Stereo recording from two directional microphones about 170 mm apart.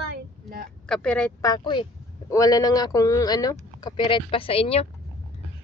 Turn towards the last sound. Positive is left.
turn(degrees=35)  # may be behind; listen again after turning